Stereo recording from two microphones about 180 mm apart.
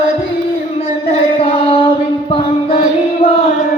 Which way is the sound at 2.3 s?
30° left (ahead or behind).